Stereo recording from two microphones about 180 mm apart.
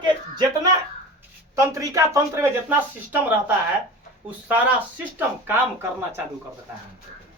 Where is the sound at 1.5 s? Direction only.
15° right (ahead or behind).